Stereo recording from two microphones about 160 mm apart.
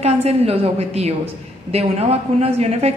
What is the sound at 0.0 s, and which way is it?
A woman's voice, 40° right (ahead or behind).